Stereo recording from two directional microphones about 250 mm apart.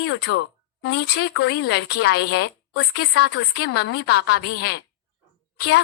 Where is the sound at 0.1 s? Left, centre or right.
Left.